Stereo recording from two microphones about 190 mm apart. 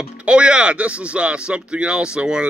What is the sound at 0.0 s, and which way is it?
Speech, 5° right (ahead or behind).